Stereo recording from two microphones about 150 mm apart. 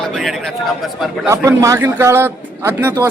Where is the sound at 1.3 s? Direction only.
20° right (ahead or behind).